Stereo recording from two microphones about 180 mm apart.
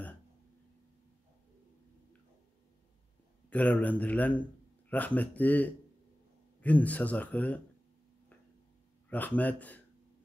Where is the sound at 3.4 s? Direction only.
10° left (ahead or behind).